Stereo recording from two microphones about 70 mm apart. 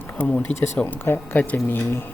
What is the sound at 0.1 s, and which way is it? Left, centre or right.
Speech, left.